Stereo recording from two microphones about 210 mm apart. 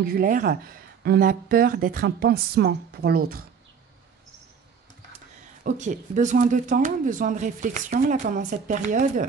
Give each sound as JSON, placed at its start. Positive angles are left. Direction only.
{"t": 0.0, "sound": "speech", "side_deg": -45}
{"t": 5.6, "sound": "speech", "side_deg": -35}